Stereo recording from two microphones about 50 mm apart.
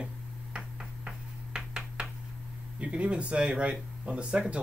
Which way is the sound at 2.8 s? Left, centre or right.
Right.